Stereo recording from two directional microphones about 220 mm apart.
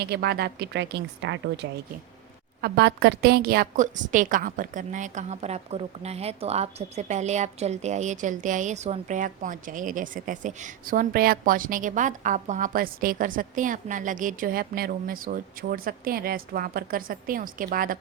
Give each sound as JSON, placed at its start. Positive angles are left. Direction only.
{"t": 0.0, "sound": "a woman's voice", "side_deg": -45}